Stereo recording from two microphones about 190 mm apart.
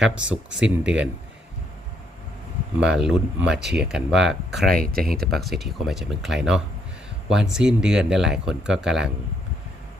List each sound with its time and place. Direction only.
0.0 s speech: 5° right (ahead or behind)
2.8 s speech: 5° right (ahead or behind)
4.8 s speech: 50° right (ahead or behind)
5.3 s speech: centre (ahead or behind)